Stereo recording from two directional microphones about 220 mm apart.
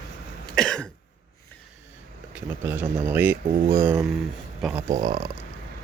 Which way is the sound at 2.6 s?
10° right (ahead or behind).